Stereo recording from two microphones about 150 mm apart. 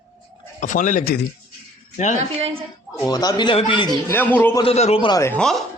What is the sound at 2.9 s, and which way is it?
Speech, 25° left (ahead or behind).